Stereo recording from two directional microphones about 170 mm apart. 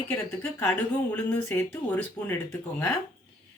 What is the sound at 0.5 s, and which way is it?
Speech, 10° left (ahead or behind).